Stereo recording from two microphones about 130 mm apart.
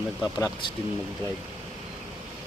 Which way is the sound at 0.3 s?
25° left (ahead or behind).